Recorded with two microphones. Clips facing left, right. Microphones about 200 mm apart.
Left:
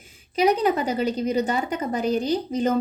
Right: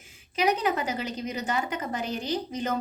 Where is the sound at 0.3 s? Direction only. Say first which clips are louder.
Left 6 dB; 35° left (ahead or behind).